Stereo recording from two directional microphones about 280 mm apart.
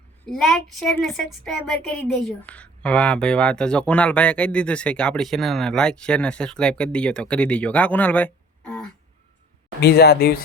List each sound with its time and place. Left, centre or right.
0.3 s speech: centre
9.8 s speech: left